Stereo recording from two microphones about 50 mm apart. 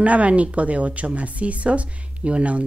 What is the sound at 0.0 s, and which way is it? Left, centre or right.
A woman's voice, right.